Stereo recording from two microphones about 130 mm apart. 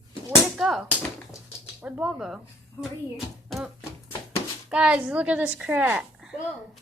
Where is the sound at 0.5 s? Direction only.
5° right (ahead or behind).